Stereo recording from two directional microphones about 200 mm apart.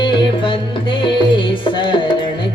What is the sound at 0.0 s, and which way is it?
Music, 25° left (ahead or behind).